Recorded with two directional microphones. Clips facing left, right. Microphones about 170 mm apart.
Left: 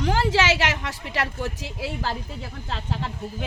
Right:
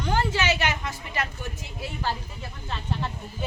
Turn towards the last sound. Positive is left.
turn(degrees=90)